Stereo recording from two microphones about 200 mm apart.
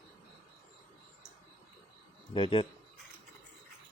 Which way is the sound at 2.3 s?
25° left (ahead or behind).